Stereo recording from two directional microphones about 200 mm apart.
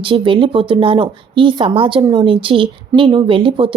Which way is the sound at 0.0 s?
25° right (ahead or behind).